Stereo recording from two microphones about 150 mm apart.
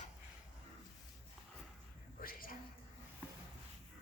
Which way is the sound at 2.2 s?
70° left (ahead or behind).